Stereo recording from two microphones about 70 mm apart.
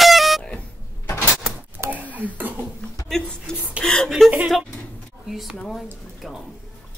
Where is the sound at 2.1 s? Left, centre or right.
Right.